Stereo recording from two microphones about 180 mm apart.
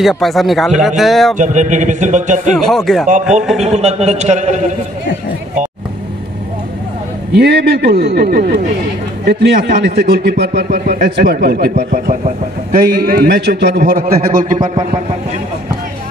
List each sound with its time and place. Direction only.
0.0 s speech: centre (ahead or behind)
1.4 s a man's voice: 45° right (ahead or behind)
2.5 s speech: centre (ahead or behind)
3.5 s a man's voice: 35° right (ahead or behind)
7.3 s a man's voice: 65° right (ahead or behind)